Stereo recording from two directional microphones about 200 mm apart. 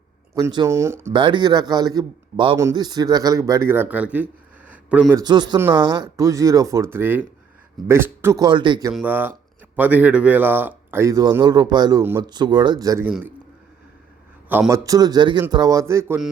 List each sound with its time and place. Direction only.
0.3 s a man's voice: 15° right (ahead or behind)
5.1 s a man's voice: 20° right (ahead or behind)
8.9 s speech: 5° right (ahead or behind)
14.7 s speech: 20° right (ahead or behind)